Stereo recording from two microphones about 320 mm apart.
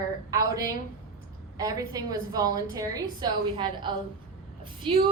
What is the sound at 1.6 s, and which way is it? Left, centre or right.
A woman's voice, centre.